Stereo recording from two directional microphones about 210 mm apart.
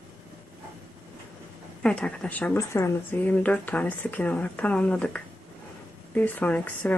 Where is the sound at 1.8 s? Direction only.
5° left (ahead or behind).